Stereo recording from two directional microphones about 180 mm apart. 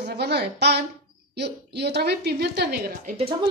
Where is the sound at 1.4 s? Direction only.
65° right (ahead or behind).